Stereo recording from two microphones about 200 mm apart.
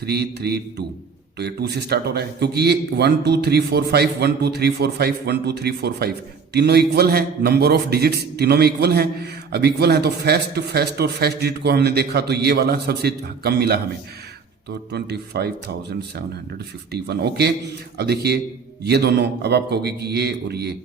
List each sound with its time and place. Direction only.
0.0 s a man's voice: 55° right (ahead or behind)
14.9 s a man's voice: 55° right (ahead or behind)